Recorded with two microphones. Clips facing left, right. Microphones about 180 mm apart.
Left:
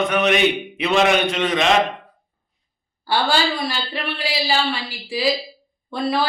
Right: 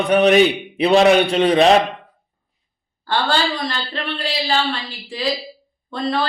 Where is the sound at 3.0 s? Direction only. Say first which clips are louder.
Even; 10° left (ahead or behind).